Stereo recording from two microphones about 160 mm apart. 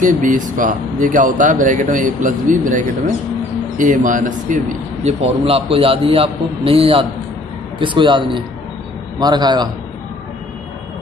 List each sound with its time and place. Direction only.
0.0 s speech: 55° right (ahead or behind)
5.0 s a man's voice: 40° right (ahead or behind)